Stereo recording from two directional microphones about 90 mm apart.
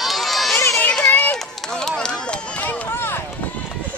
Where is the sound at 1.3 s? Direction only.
5° left (ahead or behind).